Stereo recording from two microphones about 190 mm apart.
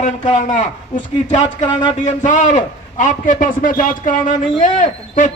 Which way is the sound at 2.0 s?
40° left (ahead or behind).